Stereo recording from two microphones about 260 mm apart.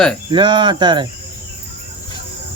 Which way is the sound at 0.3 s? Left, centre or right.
Centre.